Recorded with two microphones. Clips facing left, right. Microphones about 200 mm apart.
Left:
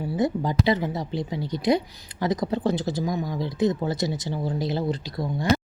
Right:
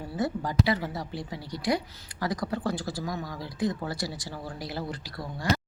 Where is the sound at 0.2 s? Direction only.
20° left (ahead or behind).